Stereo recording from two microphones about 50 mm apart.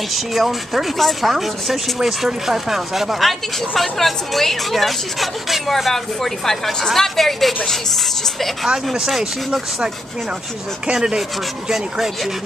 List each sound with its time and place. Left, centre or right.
0.1 s speech: centre
8.9 s speech: centre
10.9 s speech: centre